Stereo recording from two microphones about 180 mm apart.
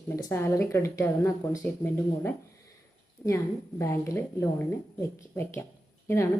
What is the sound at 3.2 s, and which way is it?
A woman's voice, 15° left (ahead or behind).